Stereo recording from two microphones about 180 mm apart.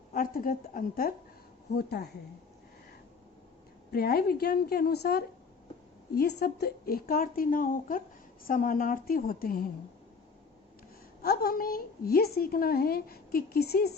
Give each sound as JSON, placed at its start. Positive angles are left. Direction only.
{"t": 0.1, "sound": "a woman's voice", "side_deg": 50}
{"t": 1.7, "sound": "a woman's voice", "side_deg": 65}
{"t": 3.9, "sound": "a woman's voice", "side_deg": 55}
{"t": 11.2, "sound": "a woman's voice", "side_deg": 55}